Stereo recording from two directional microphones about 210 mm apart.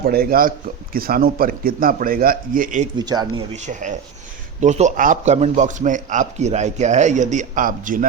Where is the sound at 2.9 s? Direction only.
20° right (ahead or behind).